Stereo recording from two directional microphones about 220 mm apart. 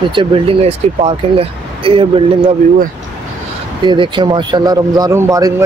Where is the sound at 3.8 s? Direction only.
20° right (ahead or behind).